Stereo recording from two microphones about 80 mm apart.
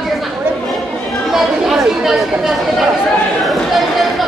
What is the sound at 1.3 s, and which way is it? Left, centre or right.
Speech, centre.